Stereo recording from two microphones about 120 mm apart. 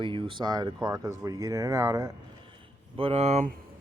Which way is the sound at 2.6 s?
50° right (ahead or behind).